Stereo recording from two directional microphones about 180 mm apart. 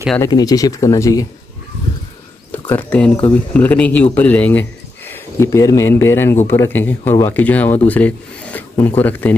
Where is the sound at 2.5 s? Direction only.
10° left (ahead or behind).